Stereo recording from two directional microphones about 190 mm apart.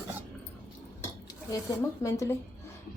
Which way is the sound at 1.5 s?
15° left (ahead or behind).